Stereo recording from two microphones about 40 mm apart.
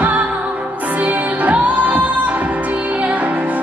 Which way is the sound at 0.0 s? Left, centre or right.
Right.